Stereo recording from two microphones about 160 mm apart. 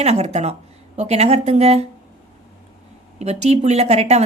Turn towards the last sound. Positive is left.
turn(degrees=-40)  # may be behind; listen again after turning